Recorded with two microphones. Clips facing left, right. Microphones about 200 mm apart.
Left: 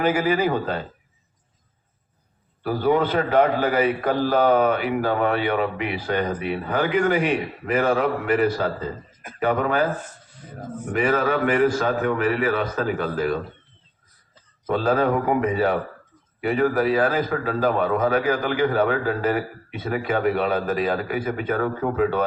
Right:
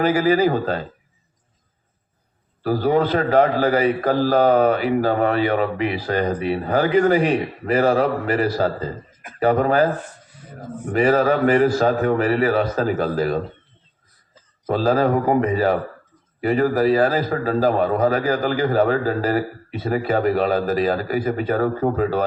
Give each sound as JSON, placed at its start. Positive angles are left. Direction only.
{"t": 0.0, "sound": "a man's voice", "side_deg": -40}
{"t": 2.6, "sound": "a man's voice", "side_deg": -35}
{"t": 10.9, "sound": "a man's voice", "side_deg": -35}
{"t": 14.7, "sound": "a man's voice", "side_deg": -35}